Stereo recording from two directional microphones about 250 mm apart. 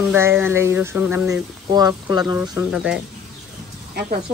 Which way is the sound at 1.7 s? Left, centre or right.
Centre.